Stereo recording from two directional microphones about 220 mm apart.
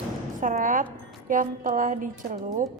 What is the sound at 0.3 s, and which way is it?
A woman's voice, 35° right (ahead or behind).